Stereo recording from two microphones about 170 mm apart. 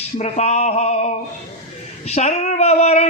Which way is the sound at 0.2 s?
40° left (ahead or behind).